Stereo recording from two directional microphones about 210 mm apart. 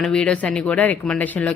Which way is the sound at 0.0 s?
5° left (ahead or behind).